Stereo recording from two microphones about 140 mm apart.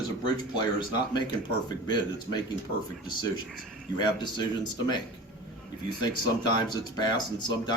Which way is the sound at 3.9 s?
30° left (ahead or behind).